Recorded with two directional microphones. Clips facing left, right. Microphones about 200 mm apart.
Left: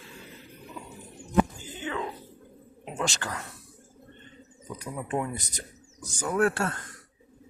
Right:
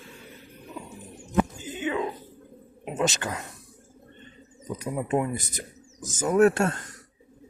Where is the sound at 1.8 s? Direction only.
15° right (ahead or behind).